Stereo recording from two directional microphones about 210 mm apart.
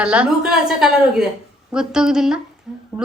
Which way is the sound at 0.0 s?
5° right (ahead or behind).